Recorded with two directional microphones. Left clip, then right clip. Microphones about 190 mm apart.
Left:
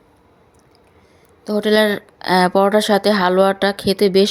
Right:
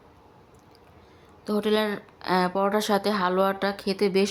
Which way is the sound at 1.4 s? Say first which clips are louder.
Left 9 dB; 20° left (ahead or behind).